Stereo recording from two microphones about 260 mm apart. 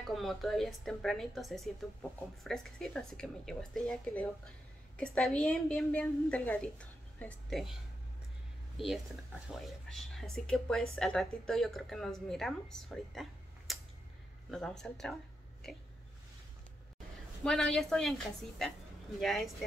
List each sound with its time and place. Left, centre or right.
0.1 s a woman's voice: centre
8.7 s a woman's voice: centre
17.4 s a woman's voice: centre